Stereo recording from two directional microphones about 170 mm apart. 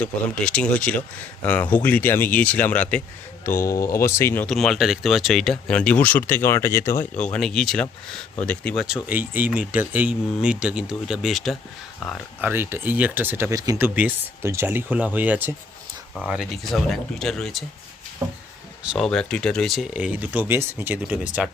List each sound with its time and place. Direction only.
0.0 s speech: 5° left (ahead or behind)
4.4 s speech: centre (ahead or behind)
7.2 s speech: 5° left (ahead or behind)
9.0 s speech: 10° right (ahead or behind)
12.4 s speech: 10° right (ahead or behind)
16.1 s speech: centre (ahead or behind)
18.8 s speech: centre (ahead or behind)